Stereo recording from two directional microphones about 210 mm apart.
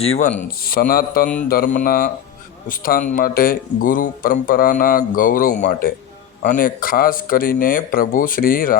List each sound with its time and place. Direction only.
0.0 s speech: 30° left (ahead or behind)